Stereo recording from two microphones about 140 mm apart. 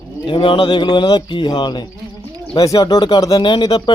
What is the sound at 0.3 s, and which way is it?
Speech, 40° left (ahead or behind).